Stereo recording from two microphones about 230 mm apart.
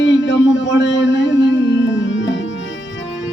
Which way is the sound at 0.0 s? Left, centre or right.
Left.